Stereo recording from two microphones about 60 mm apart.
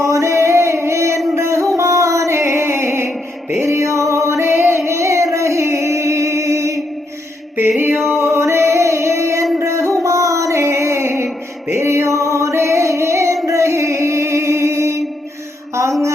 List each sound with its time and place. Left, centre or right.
0.0 s music: right
4.9 s music: right
7.5 s mantra: right
8.2 s music: right
15.7 s a sound: right